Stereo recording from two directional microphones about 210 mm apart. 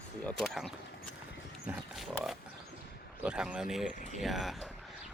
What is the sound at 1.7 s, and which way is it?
Pig, centre (ahead or behind).